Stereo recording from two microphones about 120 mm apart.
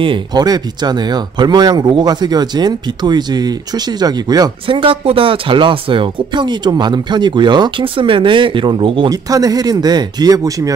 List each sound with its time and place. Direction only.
0.0 s speech: 40° right (ahead or behind)
4.6 s speech: 45° right (ahead or behind)
9.1 s speech: 30° right (ahead or behind)